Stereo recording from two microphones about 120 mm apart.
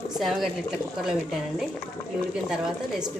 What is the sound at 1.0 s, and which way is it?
A woman's voice, 5° right (ahead or behind).